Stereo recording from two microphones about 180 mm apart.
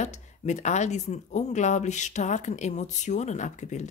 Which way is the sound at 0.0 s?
40° left (ahead or behind).